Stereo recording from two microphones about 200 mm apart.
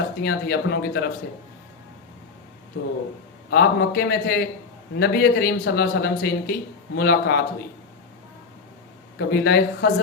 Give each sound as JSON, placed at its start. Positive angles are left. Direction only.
{"t": 0.2, "sound": "speech", "side_deg": 50}
{"t": 2.8, "sound": "a man's voice", "side_deg": 60}
{"t": 9.1, "sound": "a man's voice", "side_deg": 55}